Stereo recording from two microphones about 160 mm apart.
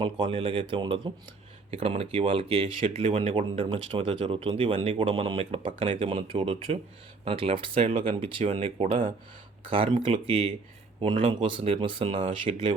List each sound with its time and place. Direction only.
0.0 s speech: 35° right (ahead or behind)